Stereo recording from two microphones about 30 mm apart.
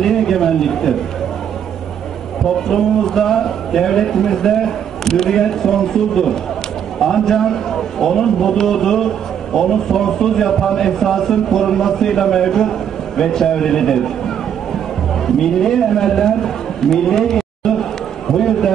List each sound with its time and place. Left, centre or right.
0.0 s a sound: centre
2.7 s a man's voice: centre
18.3 s run: centre